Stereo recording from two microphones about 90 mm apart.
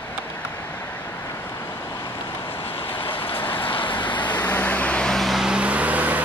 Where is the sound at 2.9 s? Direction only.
75° left (ahead or behind).